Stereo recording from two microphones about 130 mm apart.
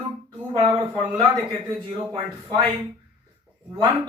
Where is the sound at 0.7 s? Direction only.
30° right (ahead or behind).